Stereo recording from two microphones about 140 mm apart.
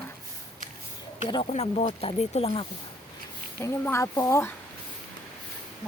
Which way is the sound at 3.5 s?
20° left (ahead or behind).